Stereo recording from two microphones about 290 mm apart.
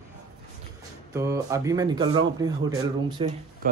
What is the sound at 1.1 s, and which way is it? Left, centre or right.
Speech, centre.